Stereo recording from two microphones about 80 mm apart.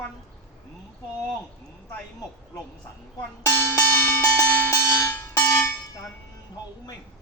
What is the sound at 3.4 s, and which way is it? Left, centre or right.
Bell, left.